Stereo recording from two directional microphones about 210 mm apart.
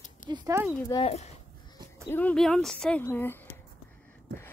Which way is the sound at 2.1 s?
5° left (ahead or behind).